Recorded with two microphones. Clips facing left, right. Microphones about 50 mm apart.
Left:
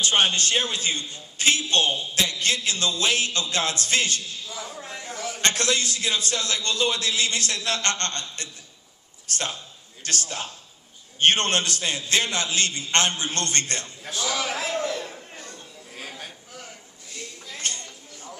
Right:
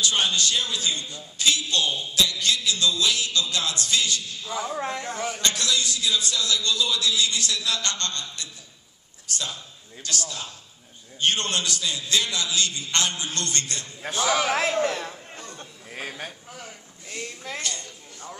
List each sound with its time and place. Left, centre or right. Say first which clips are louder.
0.0 s a man's voice: left 2 dB; left
4.5 s a man's voice: right 11 dB; right
4.7 s a man's voice: right 7 dB; right
5.1 s a man's voice: right 3 dB; right
5.4 s a man's voice: left 4 dB; left
14.0 s a man's voice: right 5 dB; right
14.8 s a sound: right 3 dB; right
15.9 s a sound: right 4 dB; right
17.6 s a sound: left 4 dB; left